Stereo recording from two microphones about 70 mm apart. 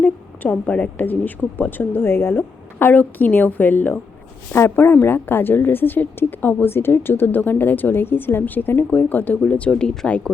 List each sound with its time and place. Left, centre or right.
0.0 s a woman's voice: left